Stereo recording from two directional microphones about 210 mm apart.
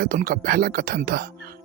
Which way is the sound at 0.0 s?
40° right (ahead or behind).